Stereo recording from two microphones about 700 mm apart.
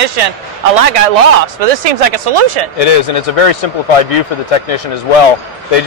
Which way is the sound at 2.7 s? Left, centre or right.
Left.